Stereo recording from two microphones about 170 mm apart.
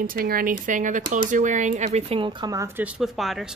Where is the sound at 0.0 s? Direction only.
55° right (ahead or behind).